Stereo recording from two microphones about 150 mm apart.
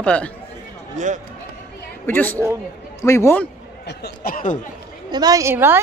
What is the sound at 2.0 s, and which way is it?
Speech, 10° left (ahead or behind).